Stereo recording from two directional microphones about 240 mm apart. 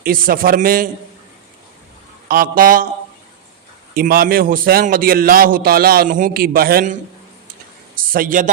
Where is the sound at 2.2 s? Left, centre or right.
Right.